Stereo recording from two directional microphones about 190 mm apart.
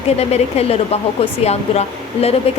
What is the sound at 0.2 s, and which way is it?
Speech, 35° left (ahead or behind).